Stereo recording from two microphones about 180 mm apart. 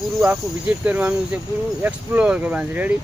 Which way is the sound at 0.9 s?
10° right (ahead or behind).